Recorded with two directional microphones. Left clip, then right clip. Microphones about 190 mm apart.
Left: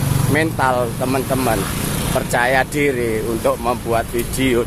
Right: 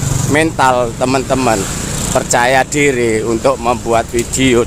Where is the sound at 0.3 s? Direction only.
25° right (ahead or behind).